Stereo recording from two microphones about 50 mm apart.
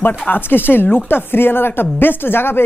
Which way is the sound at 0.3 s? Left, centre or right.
Left.